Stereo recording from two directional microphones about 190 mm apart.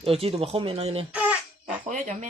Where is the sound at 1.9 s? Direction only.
40° right (ahead or behind).